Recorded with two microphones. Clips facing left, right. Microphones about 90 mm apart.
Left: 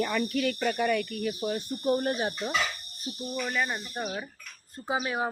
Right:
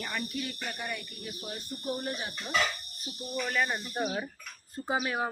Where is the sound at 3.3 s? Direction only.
5° left (ahead or behind).